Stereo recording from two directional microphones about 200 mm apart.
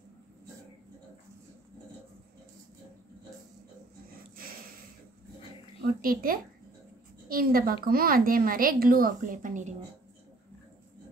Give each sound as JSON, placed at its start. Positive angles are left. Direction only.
{"t": 5.9, "sound": "a woman's voice", "side_deg": -45}